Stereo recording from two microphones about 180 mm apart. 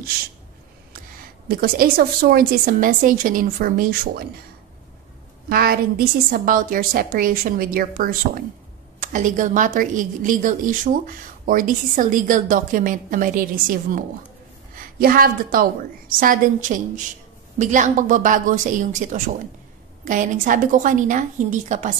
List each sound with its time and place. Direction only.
1.5 s a woman's voice: 55° right (ahead or behind)
5.5 s a woman's voice: 55° right (ahead or behind)